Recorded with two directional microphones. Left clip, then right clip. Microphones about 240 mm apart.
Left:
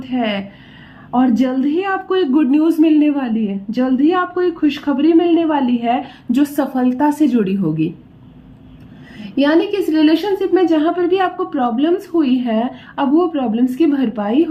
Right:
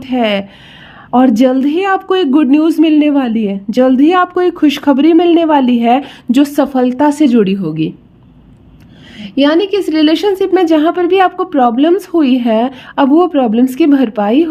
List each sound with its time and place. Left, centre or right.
0.0 s a woman's voice: right
9.1 s speech: right